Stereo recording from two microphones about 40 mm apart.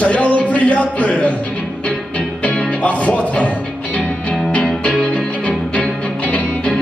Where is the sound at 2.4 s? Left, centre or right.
Left.